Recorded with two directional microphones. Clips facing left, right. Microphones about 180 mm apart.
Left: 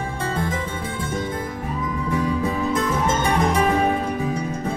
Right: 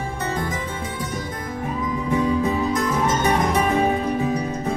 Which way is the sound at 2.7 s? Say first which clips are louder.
Even; 25° left (ahead or behind).